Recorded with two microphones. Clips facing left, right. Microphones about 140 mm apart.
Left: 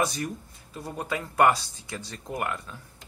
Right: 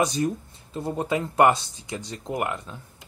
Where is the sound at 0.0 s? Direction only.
20° right (ahead or behind).